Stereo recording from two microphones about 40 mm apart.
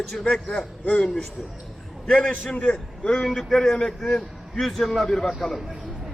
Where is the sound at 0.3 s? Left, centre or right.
Left.